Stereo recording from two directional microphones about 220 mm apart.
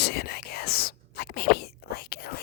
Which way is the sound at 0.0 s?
45° left (ahead or behind).